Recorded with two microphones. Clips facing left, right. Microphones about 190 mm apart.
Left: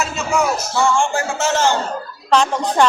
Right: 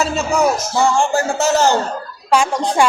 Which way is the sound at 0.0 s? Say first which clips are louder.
Right 4 dB; 35° right (ahead or behind).